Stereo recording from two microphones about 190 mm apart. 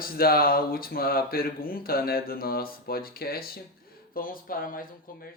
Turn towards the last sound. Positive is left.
turn(degrees=50)  # may be behind; listen again after turning